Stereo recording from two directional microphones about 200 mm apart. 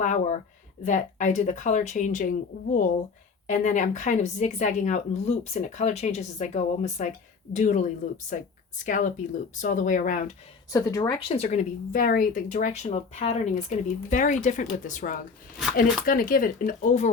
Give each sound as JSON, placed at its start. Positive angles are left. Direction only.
{"t": 0.0, "sound": "speech", "side_deg": 40}
{"t": 8.9, "sound": "speech", "side_deg": 40}
{"t": 10.7, "sound": "speech", "side_deg": 15}